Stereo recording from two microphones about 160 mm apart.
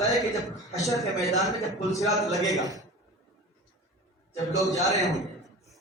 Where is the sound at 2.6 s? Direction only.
20° right (ahead or behind).